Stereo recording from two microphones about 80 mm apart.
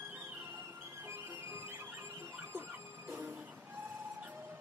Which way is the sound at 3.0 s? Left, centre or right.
Right.